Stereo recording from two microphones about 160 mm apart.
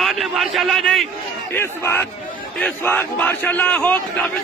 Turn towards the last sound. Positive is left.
turn(degrees=10)  # may be behind; listen again after turning